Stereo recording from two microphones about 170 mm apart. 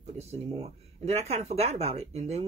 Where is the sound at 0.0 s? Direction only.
35° right (ahead or behind).